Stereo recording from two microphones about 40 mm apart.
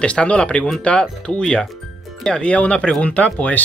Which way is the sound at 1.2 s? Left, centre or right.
Centre.